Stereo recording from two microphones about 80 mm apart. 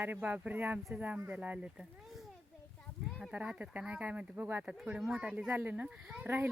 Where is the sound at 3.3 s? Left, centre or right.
Centre.